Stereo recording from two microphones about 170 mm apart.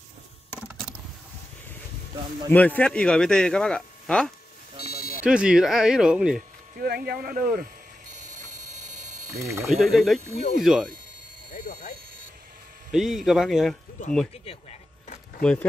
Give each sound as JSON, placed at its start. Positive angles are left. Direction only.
{"t": 0.5, "sound": "a sound", "side_deg": -5}
{"t": 2.5, "sound": "speech", "side_deg": 10}
{"t": 4.7, "sound": "a sound", "side_deg": 65}
{"t": 5.2, "sound": "speech", "side_deg": -5}
{"t": 6.8, "sound": "a sound", "side_deg": -65}
{"t": 9.3, "sound": "speech", "side_deg": -20}
{"t": 9.7, "sound": "speech", "side_deg": 0}
{"t": 11.5, "sound": "speech", "side_deg": 55}
{"t": 12.9, "sound": "speech", "side_deg": 0}
{"t": 14.0, "sound": "speech", "side_deg": 45}
{"t": 14.3, "sound": "speech", "side_deg": 35}